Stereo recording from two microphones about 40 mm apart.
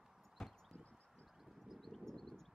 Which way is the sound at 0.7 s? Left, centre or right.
Left.